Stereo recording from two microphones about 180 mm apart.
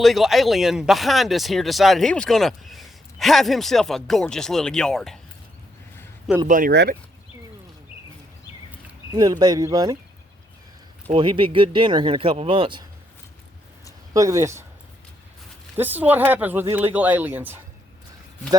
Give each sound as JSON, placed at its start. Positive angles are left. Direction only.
{"t": 0.0, "sound": "speech", "side_deg": 0}
{"t": 6.5, "sound": "speech", "side_deg": -50}
{"t": 9.1, "sound": "speech", "side_deg": -25}
{"t": 11.1, "sound": "speech", "side_deg": -30}
{"t": 14.1, "sound": "speech", "side_deg": -20}
{"t": 15.8, "sound": "speech", "side_deg": -10}